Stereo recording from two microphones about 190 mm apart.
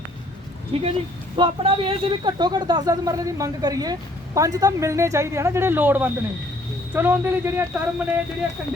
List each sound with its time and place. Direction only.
0.7 s speech: 30° right (ahead or behind); by 8.0 s 10° right (ahead or behind)